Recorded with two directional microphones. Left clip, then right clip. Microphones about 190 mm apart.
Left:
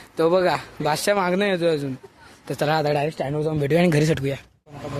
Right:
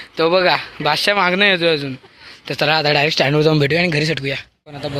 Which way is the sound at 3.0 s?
20° right (ahead or behind).